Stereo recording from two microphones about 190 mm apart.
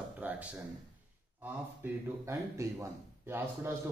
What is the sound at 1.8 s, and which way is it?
Speech, 15° right (ahead or behind).